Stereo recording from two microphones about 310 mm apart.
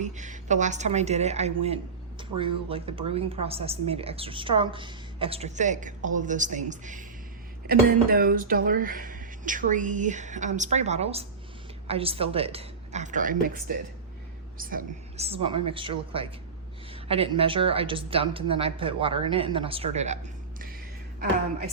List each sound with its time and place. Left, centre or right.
0.0 s a woman's voice: right